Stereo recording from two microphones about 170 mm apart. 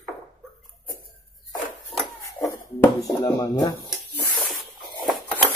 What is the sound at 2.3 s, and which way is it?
Speech, 15° left (ahead or behind).